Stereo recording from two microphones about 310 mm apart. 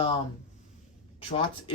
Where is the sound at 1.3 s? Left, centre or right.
Centre.